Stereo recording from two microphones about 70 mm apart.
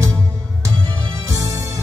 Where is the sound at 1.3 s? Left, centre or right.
Right.